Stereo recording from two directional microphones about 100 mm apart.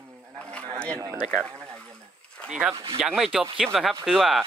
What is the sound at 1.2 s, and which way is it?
Speech, 10° left (ahead or behind).